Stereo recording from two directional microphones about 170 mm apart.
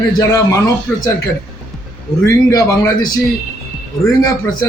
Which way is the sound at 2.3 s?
20° left (ahead or behind).